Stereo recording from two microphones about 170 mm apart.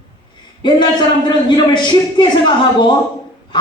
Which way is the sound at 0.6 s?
25° left (ahead or behind).